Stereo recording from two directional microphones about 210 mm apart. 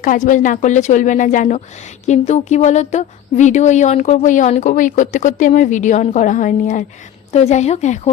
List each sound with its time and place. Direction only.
0.0 s a woman's voice: 35° left (ahead or behind)